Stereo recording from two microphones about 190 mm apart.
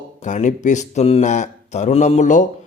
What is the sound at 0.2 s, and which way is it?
A man's voice, 40° left (ahead or behind).